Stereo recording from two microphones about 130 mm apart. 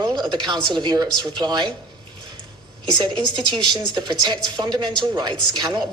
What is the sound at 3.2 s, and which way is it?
A woman's voice, 35° right (ahead or behind).